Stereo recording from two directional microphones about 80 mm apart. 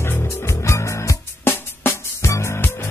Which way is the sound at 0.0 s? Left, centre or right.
Left.